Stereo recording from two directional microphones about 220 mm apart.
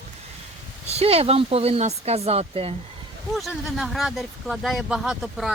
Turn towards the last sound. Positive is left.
turn(degrees=0)  # may be behind; listen again after turning